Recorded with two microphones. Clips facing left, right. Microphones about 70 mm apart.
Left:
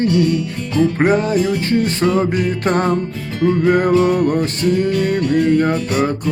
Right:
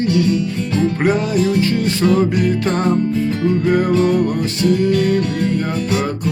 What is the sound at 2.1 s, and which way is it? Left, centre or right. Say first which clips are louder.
Music: right 3 dB; left.